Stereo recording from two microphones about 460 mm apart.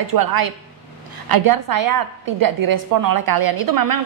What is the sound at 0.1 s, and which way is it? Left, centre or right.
A woman's voice, right.